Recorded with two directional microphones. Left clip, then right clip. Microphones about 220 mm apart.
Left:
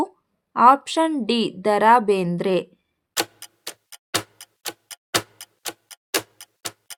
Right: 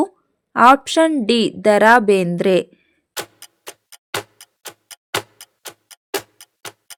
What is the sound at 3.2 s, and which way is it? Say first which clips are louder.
Tick-tock: left 4 dB; centre (ahead or behind).